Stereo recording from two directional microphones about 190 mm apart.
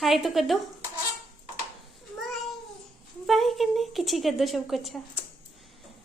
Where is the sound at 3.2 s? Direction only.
Centre (ahead or behind).